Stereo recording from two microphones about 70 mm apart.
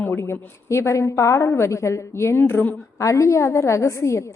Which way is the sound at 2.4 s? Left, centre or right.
Left.